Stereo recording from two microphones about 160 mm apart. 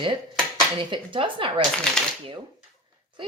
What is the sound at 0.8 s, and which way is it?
Speech, 30° right (ahead or behind).